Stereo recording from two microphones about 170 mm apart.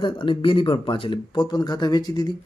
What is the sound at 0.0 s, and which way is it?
Speech, 30° left (ahead or behind).